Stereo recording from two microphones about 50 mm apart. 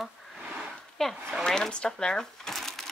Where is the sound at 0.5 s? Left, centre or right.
Centre.